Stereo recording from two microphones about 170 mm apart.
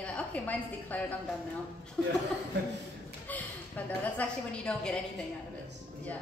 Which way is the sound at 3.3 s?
10° left (ahead or behind).